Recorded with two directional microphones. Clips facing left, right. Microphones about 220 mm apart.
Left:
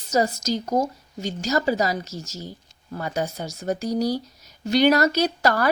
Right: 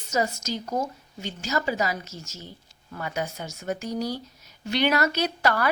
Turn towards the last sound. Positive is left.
turn(degrees=40)  # may be behind; listen again after turning